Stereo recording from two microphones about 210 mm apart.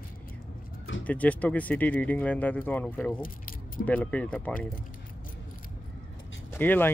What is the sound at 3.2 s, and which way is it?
Speech, 40° left (ahead or behind).